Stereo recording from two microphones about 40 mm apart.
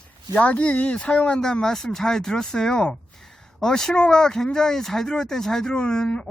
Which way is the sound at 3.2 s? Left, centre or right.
Centre.